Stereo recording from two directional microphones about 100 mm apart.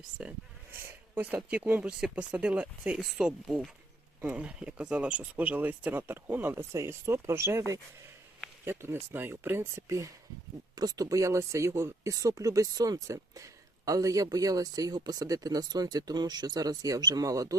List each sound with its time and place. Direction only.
0.2 s speech: 10° right (ahead or behind)
0.7 s a sound: 20° right (ahead or behind)
1.5 s speech: 15° right (ahead or behind)
10.8 s speech: 40° right (ahead or behind)